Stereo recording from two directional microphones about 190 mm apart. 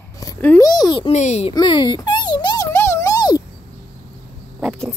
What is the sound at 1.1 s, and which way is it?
Speech, 35° left (ahead or behind).